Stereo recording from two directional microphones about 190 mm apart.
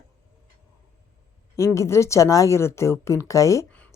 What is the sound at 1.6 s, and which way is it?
Speech, 15° left (ahead or behind).